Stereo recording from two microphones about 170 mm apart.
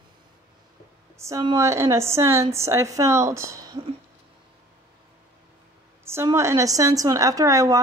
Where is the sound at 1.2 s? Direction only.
15° right (ahead or behind).